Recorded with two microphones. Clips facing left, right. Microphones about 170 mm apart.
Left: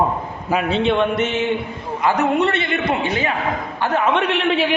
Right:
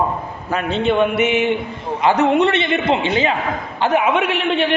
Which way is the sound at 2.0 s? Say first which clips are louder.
Right 3 dB; 20° right (ahead or behind).